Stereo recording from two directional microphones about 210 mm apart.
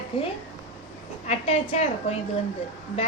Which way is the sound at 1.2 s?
30° left (ahead or behind).